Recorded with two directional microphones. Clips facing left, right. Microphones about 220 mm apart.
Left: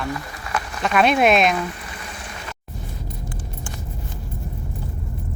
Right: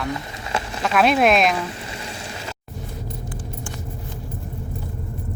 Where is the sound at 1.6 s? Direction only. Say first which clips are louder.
Right 1 dB; 25° right (ahead or behind).